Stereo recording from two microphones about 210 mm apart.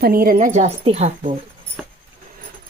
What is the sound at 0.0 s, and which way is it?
A woman's voice, 45° right (ahead or behind).